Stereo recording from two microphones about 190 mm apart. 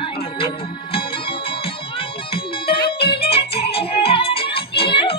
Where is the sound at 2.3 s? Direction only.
30° left (ahead or behind).